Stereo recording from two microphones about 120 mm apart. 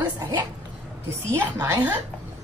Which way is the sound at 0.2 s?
30° right (ahead or behind).